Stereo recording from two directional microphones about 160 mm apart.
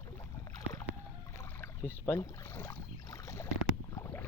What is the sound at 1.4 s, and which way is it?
Boat, 15° left (ahead or behind).